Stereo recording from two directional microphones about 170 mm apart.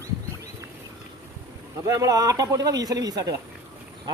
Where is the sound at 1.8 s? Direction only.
20° right (ahead or behind).